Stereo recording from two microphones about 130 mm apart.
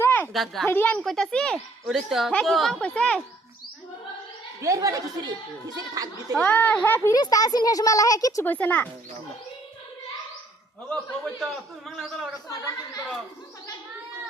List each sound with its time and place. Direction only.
0.0 s a sound: 15° left (ahead or behind)
0.3 s a man's voice: centre (ahead or behind)
0.7 s speech: 15° left (ahead or behind)
0.9 s a man's voice: 5° left (ahead or behind)
4.6 s speech: 25° right (ahead or behind)
6.5 s speech: 10° left (ahead or behind)
7.1 s speech: 30° left (ahead or behind)
8.4 s speech: 10° left (ahead or behind)
10.8 s a man's voice: 5° left (ahead or behind)